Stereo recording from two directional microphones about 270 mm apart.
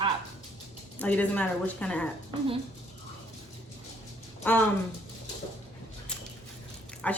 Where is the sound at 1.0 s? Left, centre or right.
Centre.